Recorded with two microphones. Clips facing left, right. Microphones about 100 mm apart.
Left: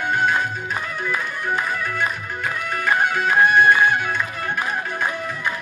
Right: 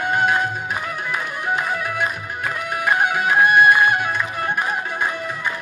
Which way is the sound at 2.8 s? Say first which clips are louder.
Right 1 dB; 10° right (ahead or behind).